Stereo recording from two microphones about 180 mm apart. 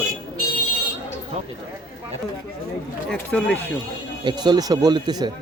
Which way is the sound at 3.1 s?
5° left (ahead or behind).